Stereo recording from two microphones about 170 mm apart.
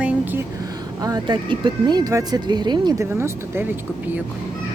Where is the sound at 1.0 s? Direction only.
25° right (ahead or behind).